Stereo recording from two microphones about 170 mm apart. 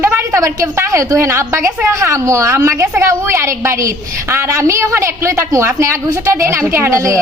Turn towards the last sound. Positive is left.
turn(degrees=-15)  # may be behind; listen again after turning